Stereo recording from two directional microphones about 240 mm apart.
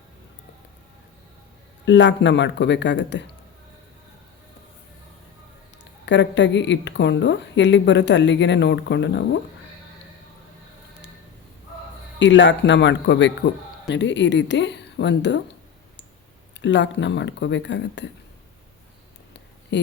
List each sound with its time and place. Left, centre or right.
1.8 s a woman's voice: left
5.8 s a woman's voice: left
12.2 s a woman's voice: left
16.6 s a woman's voice: left
19.7 s a woman's voice: left